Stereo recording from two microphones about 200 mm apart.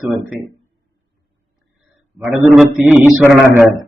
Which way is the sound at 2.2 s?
5° right (ahead or behind).